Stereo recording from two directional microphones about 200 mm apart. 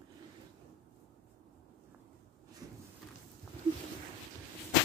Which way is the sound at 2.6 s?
20° right (ahead or behind).